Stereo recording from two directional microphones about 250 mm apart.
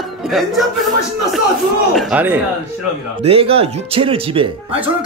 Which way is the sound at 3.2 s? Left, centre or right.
Right.